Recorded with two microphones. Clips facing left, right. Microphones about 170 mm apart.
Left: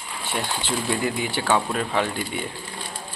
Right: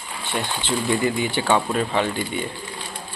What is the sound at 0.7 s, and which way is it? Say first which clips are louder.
Speech: right 4 dB; 5° left (ahead or behind).